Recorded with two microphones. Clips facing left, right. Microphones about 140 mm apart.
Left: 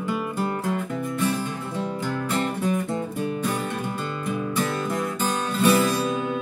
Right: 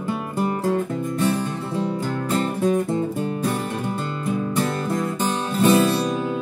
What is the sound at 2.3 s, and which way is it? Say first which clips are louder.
Music: right 5 dB; 30° right (ahead or behind).